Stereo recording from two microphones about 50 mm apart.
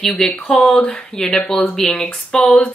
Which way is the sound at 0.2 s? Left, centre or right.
Centre.